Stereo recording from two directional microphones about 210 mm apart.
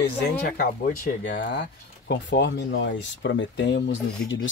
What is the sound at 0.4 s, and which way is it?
Speech, 40° left (ahead or behind).